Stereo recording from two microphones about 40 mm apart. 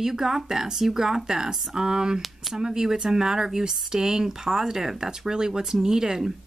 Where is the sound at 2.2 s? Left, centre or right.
Centre.